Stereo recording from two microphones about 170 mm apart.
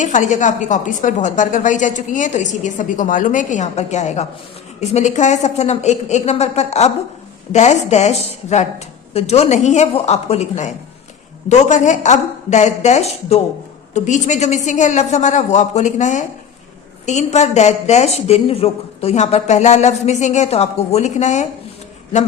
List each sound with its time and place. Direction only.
0.0 s a woman's voice: 45° left (ahead or behind)